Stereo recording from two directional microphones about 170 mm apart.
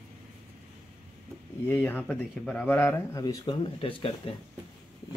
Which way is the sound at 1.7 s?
10° left (ahead or behind).